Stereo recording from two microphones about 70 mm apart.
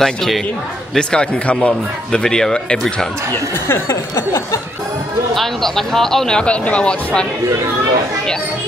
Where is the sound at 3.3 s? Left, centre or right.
Left.